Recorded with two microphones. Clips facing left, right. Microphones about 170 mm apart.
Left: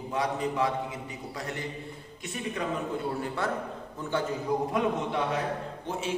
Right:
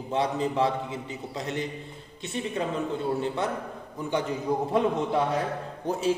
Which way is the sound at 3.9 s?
15° right (ahead or behind).